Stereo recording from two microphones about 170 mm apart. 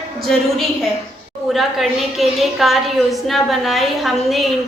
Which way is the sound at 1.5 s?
Centre (ahead or behind).